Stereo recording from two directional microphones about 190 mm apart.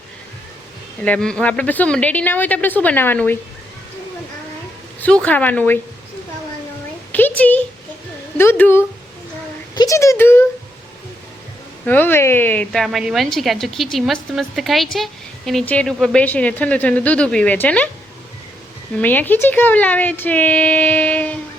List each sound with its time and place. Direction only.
1.0 s a woman's voice: 5° left (ahead or behind)
4.9 s a woman's voice: 5° left (ahead or behind)
7.1 s a sound: 10° left (ahead or behind)
8.4 s a woman's voice: 10° left (ahead or behind)
11.9 s a woman's voice: 10° left (ahead or behind)
18.9 s a woman's voice: 10° left (ahead or behind)